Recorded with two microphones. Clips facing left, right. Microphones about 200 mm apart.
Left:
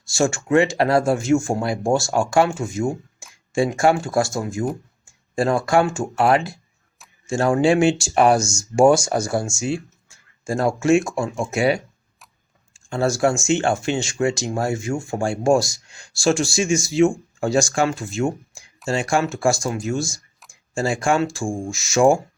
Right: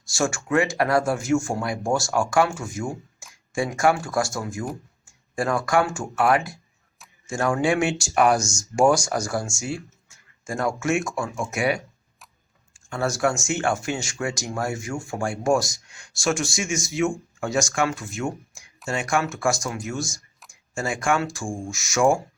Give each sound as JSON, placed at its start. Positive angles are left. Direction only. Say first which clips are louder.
{"t": 0.1, "sound": "speech", "louder": "left 5 dB", "side_deg": 25}